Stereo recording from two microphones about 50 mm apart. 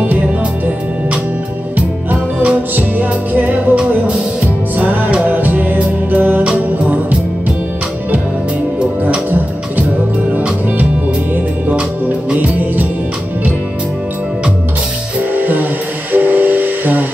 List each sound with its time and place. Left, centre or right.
1.8 s music: right
2.7 s music: right
4.7 s music: right
12.4 s music: right
15.3 s music: right